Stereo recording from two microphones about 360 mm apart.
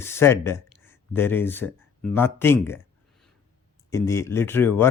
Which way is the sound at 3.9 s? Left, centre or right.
Centre.